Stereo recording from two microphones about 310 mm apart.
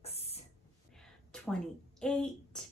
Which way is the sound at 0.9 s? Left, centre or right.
Centre.